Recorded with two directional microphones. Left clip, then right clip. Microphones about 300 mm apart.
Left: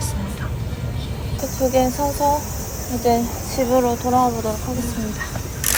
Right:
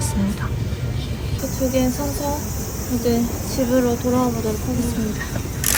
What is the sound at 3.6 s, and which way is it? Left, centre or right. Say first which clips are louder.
Speech: left 2 dB; centre.